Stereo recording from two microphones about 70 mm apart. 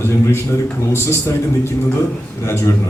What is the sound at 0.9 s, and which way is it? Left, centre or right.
Speech, left.